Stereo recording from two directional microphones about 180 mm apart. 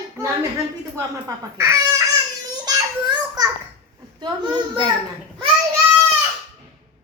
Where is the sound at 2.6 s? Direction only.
20° right (ahead or behind).